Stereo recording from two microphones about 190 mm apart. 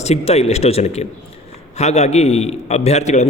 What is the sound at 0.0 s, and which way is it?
A man's voice, 35° left (ahead or behind).